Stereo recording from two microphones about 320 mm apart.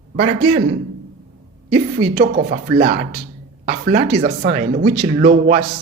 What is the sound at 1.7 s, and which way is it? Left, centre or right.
A woman's voice, right.